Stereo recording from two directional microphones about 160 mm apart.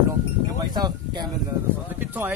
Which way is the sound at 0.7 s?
25° right (ahead or behind).